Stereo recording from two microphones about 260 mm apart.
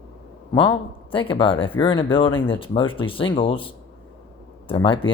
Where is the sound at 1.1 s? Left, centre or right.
Centre.